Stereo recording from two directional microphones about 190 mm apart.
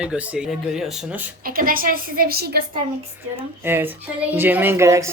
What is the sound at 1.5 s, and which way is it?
A woman's voice, 50° right (ahead or behind).